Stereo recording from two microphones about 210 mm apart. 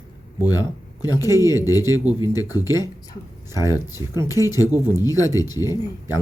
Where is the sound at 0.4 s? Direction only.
20° left (ahead or behind).